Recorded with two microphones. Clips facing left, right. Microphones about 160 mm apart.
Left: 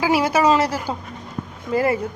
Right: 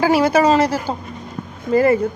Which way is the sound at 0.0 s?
10° left (ahead or behind).